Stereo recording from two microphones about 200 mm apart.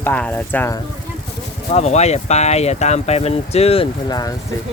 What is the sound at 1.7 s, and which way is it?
Speech, 35° left (ahead or behind).